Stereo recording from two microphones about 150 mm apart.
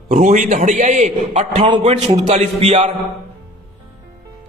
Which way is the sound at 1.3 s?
40° right (ahead or behind).